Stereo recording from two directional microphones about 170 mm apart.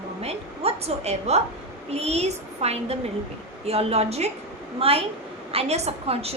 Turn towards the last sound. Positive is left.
turn(degrees=-35)  # may be behind; listen again after turning